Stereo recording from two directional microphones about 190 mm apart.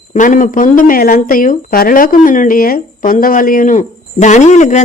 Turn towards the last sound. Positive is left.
turn(degrees=40)  # may be behind; listen again after turning